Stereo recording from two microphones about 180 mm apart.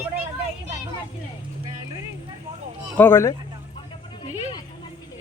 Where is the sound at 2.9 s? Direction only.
10° left (ahead or behind).